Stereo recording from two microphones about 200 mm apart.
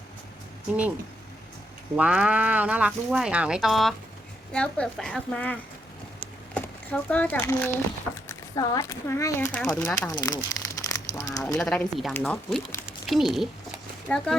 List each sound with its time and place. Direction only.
2.0 s a woman's voice: 5° right (ahead or behind)
6.1 s a sound: 5° left (ahead or behind)
8.1 s speech: 15° left (ahead or behind)
10.1 s speech: 20° left (ahead or behind)
11.5 s a woman's voice: 5° left (ahead or behind)